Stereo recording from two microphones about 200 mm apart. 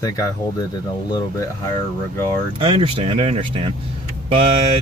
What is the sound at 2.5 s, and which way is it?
Speech, 25° right (ahead or behind).